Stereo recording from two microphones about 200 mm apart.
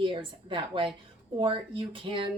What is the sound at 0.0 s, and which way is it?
A woman's voice, 25° right (ahead or behind).